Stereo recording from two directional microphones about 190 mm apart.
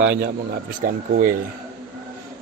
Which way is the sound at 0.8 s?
45° right (ahead or behind).